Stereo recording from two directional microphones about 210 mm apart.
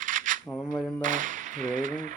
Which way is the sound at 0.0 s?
40° right (ahead or behind).